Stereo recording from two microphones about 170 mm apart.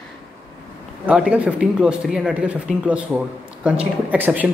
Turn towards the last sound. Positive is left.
turn(degrees=-10)  # may be behind; listen again after turning